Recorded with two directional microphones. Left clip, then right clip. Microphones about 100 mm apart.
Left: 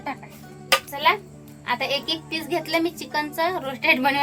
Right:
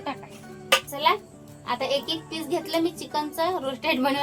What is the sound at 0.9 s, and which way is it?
A child's voice, 5° left (ahead or behind).